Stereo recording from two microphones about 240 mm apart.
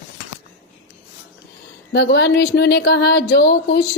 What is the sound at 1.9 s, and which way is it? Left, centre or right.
A woman's voice, left.